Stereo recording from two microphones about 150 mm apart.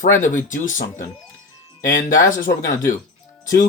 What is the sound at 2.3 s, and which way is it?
Speech, 65° left (ahead or behind).